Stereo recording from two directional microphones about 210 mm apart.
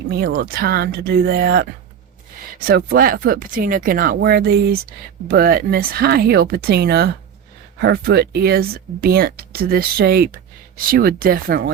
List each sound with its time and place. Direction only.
0.1 s speech: 45° right (ahead or behind)
2.6 s speech: 45° right (ahead or behind)